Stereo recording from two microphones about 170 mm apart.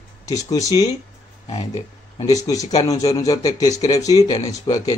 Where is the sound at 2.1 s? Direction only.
20° left (ahead or behind).